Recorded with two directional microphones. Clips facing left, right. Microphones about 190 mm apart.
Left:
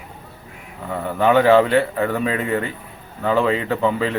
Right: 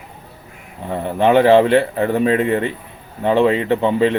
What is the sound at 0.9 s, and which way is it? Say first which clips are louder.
A man's voice: right 2 dB; 25° right (ahead or behind).